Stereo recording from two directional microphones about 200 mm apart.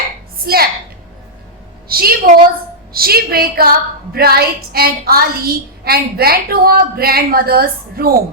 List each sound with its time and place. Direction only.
0.4 s a woman's voice: 50° right (ahead or behind)
1.9 s a woman's voice: 45° right (ahead or behind)